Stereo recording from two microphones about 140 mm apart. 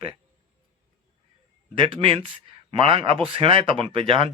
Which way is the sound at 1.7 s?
40° right (ahead or behind).